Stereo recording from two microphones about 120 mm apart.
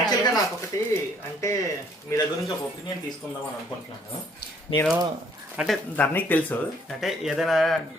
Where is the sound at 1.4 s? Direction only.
25° left (ahead or behind).